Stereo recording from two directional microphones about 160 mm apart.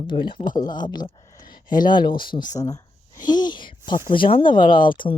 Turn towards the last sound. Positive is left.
turn(degrees=30)  # may be behind; listen again after turning